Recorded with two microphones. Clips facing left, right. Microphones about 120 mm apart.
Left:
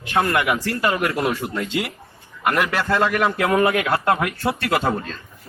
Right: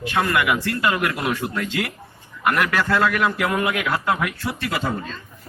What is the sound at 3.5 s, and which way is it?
Speech, 50° left (ahead or behind).